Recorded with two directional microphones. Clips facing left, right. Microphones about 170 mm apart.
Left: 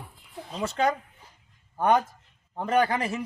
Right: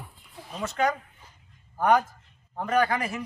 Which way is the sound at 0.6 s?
30° left (ahead or behind).